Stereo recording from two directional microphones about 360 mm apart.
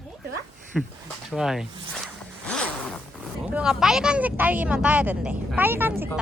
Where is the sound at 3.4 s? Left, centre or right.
Centre.